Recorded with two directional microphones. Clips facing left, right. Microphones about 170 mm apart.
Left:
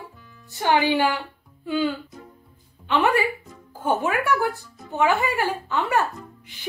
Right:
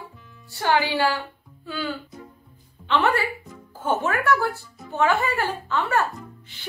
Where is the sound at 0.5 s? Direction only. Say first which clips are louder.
Left 2 dB; 20° left (ahead or behind).